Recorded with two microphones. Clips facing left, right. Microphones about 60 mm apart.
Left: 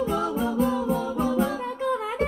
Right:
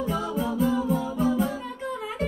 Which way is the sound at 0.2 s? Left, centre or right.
Left.